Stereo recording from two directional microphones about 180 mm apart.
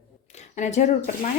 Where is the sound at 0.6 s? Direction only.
40° left (ahead or behind).